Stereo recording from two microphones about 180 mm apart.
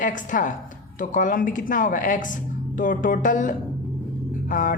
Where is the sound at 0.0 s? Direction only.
45° left (ahead or behind).